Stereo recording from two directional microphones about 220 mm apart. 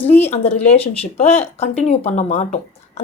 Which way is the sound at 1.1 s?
30° left (ahead or behind).